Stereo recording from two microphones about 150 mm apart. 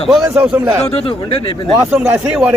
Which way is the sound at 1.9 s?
5° right (ahead or behind).